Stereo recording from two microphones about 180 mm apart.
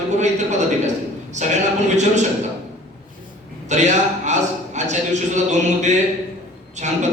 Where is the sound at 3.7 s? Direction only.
40° right (ahead or behind).